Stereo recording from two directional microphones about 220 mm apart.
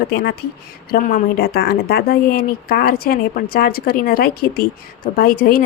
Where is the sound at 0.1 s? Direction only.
45° left (ahead or behind).